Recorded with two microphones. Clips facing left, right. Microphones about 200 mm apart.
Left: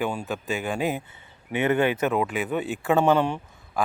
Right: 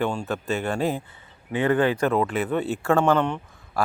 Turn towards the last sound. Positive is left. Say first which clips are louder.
# right 1 dB
turn(degrees=10)  # may be behind; listen again after turning